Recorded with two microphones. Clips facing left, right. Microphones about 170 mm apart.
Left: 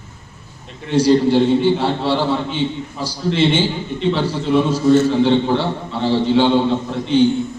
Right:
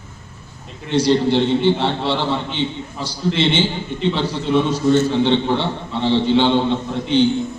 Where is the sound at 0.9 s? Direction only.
10° left (ahead or behind).